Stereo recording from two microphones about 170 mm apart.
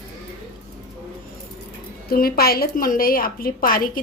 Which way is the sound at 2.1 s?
60° left (ahead or behind).